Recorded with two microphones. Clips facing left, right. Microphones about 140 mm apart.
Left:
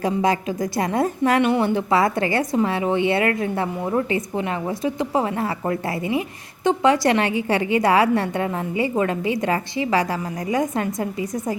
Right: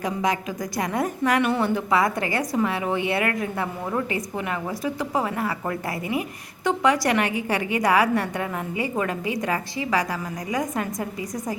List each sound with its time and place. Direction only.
0.0 s a woman's voice: 30° left (ahead or behind)